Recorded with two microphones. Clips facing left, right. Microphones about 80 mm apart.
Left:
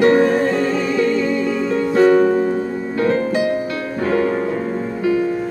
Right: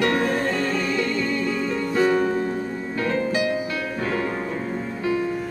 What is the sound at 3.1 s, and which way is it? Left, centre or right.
Music, left.